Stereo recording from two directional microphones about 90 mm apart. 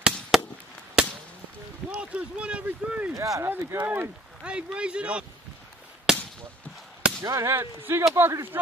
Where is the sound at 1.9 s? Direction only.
10° right (ahead or behind).